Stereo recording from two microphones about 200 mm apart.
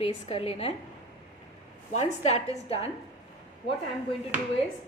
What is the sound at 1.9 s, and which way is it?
Speech, 35° left (ahead or behind).